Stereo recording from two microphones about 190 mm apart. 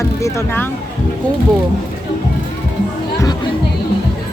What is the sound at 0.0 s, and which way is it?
Speech, 15° left (ahead or behind).